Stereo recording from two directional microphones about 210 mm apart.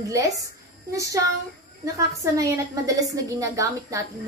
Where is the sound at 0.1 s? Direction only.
15° right (ahead or behind).